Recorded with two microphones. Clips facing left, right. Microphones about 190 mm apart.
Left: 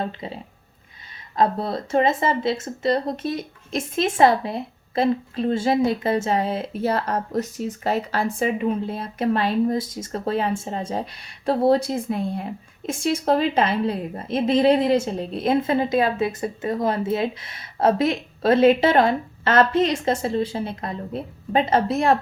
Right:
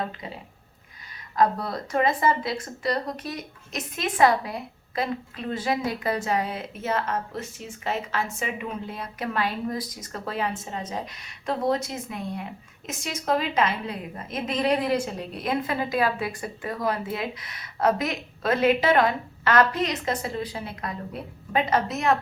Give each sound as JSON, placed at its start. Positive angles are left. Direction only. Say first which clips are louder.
{"t": 1.4, "sound": "speech", "louder": "left 2 dB", "side_deg": 25}